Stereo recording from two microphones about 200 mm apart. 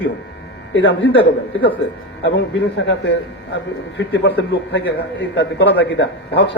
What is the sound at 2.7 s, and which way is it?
A man's voice, 65° left (ahead or behind).